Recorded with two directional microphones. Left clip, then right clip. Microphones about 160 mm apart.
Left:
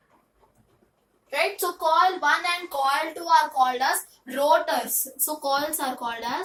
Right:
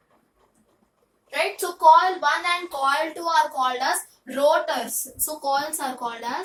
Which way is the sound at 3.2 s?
15° right (ahead or behind).